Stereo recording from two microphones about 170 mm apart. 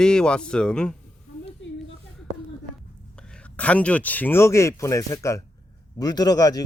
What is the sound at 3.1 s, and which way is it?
Speech, 5° left (ahead or behind).